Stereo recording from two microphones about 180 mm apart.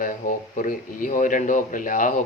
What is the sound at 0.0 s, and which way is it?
Speech, 50° left (ahead or behind).